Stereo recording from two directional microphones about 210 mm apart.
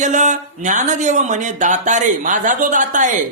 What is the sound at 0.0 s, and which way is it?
A man's voice, 35° right (ahead or behind).